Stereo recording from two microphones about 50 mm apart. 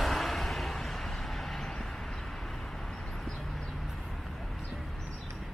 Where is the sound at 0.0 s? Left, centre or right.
Centre.